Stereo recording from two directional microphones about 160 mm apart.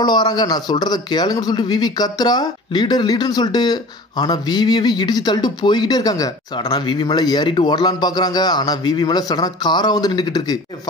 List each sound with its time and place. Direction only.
0.0 s a man's voice: 25° left (ahead or behind)